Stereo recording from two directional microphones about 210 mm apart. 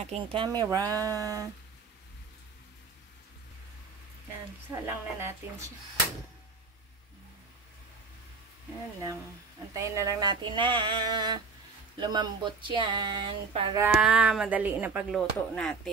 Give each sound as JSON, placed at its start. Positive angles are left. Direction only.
{"t": 0.2, "sound": "speech", "side_deg": -25}
{"t": 4.6, "sound": "speech", "side_deg": -10}
{"t": 9.8, "sound": "speech", "side_deg": -15}
{"t": 13.7, "sound": "speech", "side_deg": -5}